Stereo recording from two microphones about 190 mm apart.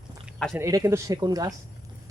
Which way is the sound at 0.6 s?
20° right (ahead or behind).